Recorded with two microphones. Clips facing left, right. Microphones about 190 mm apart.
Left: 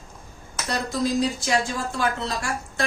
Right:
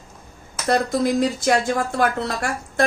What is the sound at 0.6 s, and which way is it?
A woman's voice, 55° right (ahead or behind).